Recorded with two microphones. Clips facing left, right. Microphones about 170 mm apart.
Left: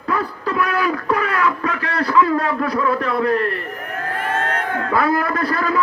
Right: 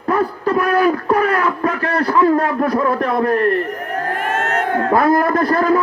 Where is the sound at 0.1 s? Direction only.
45° right (ahead or behind).